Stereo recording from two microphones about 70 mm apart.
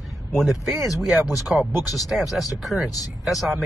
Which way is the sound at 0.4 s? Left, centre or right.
Centre.